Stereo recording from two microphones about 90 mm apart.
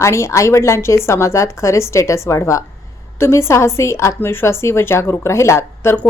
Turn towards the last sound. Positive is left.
turn(degrees=30)  # may be behind; listen again after turning